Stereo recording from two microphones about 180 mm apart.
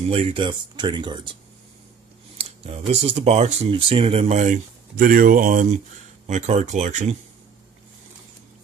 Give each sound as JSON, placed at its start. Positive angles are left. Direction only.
{"t": 0.1, "sound": "speech", "side_deg": -30}
{"t": 2.3, "sound": "a sound", "side_deg": -35}
{"t": 2.9, "sound": "speech", "side_deg": -35}